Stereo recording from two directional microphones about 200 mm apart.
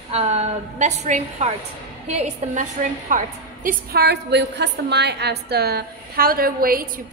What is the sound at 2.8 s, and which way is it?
A woman's voice, 40° right (ahead or behind).